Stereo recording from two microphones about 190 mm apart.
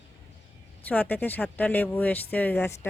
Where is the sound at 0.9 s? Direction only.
10° left (ahead or behind).